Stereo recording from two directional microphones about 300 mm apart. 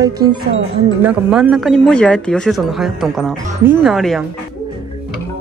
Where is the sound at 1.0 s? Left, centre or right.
Centre.